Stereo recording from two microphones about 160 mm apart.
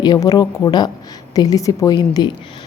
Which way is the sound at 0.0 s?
25° left (ahead or behind).